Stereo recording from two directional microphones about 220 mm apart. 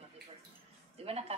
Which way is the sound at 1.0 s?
25° right (ahead or behind).